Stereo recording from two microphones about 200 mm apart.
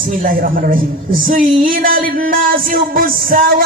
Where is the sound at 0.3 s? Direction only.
45° right (ahead or behind).